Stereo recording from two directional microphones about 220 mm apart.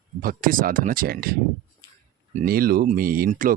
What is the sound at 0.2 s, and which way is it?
Speech, 40° right (ahead or behind).